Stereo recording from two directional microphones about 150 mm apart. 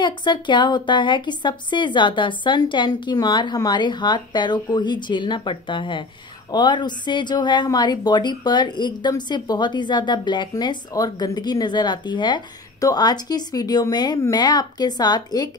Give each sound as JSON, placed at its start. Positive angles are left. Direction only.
{"t": 0.0, "sound": "a woman's voice", "side_deg": 30}